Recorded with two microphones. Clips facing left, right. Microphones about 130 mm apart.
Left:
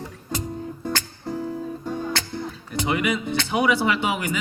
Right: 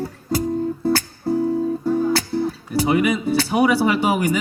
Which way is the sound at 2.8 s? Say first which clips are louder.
Right 6 dB; 35° right (ahead or behind).